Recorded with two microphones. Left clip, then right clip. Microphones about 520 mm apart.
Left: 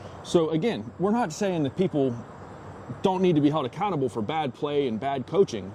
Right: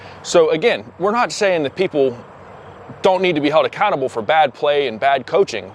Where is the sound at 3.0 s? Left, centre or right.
Right.